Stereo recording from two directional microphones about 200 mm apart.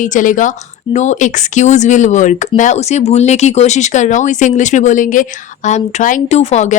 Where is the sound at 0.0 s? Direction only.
40° left (ahead or behind).